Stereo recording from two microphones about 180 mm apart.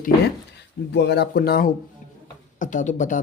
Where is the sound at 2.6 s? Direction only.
45° left (ahead or behind).